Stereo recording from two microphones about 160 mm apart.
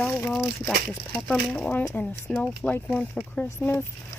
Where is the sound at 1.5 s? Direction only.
10° left (ahead or behind).